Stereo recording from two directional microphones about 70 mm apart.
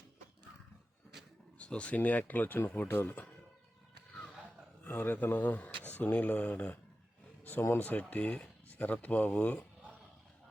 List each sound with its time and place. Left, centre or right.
1.5 s speech: centre
2.8 s speech: left
4.8 s speech: left
7.8 s speech: left